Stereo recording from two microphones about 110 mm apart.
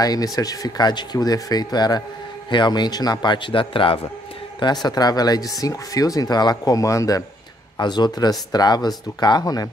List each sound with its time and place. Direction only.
0.0 s a man's voice: 35° left (ahead or behind); by 4.0 s 50° left (ahead or behind)
4.6 s speech: 40° left (ahead or behind)
7.7 s speech: 40° left (ahead or behind)